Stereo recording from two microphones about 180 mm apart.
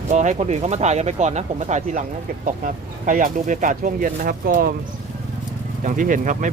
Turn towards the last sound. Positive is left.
turn(degrees=-45)  # may be behind; listen again after turning